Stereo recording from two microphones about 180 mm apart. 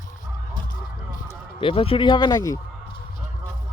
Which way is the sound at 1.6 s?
30° left (ahead or behind).